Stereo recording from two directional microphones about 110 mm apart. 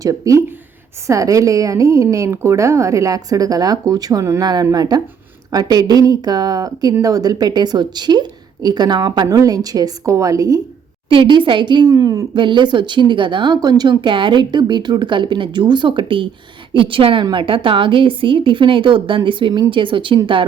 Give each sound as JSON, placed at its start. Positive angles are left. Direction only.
{"t": 0.0, "sound": "a woman's voice", "side_deg": -30}
{"t": 11.1, "sound": "speech", "side_deg": -50}
{"t": 12.3, "sound": "speech", "side_deg": -45}